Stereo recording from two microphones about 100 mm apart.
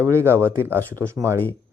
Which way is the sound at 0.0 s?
25° right (ahead or behind).